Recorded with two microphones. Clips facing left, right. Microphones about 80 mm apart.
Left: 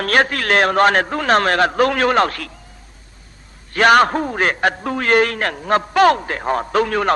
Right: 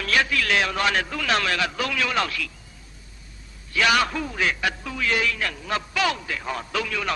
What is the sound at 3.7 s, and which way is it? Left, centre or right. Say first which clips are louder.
A man's voice: left 9 dB; left.